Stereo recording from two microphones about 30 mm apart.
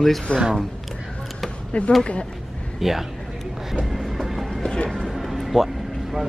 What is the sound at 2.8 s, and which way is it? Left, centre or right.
Speech, centre.